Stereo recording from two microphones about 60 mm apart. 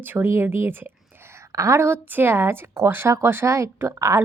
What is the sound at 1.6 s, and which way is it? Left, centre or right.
Speech, right.